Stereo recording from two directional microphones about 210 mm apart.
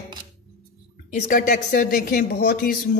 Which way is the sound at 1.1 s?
35° left (ahead or behind).